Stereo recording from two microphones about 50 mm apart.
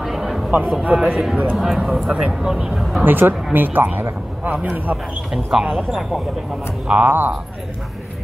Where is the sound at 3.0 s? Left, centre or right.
Right.